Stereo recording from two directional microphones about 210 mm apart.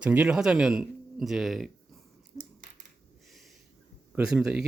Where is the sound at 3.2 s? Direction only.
Centre (ahead or behind).